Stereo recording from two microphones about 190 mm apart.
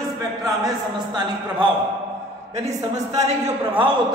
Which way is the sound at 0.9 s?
25° right (ahead or behind).